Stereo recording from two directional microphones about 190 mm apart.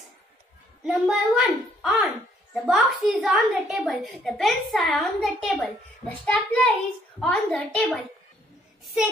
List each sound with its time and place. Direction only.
0.8 s a woman's voice: 5° right (ahead or behind)